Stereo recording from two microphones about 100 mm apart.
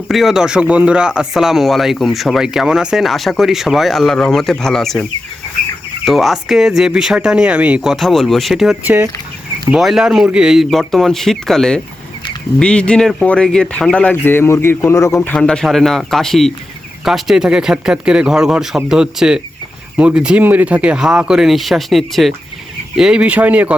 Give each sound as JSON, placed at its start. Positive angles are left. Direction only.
{"t": 0.1, "sound": "speech", "side_deg": 0}
{"t": 6.1, "sound": "speech", "side_deg": 0}
{"t": 7.9, "sound": "speech", "side_deg": 0}
{"t": 8.8, "sound": "speech", "side_deg": -15}
{"t": 9.6, "sound": "speech", "side_deg": -5}
{"t": 15.3, "sound": "speech", "side_deg": 10}